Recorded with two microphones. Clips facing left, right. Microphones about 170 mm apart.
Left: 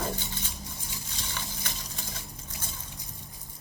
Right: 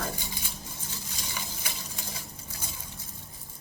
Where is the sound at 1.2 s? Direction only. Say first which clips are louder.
Left 1 dB; 10° right (ahead or behind).